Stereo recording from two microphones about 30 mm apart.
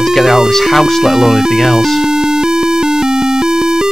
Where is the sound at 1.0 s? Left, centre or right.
Centre.